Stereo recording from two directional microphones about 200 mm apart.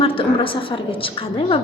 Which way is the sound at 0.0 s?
25° left (ahead or behind).